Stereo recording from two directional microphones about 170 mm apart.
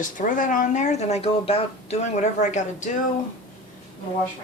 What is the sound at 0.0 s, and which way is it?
Speech, 50° left (ahead or behind).